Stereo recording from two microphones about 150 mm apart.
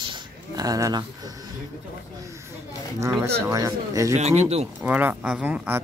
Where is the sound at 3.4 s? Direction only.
20° right (ahead or behind).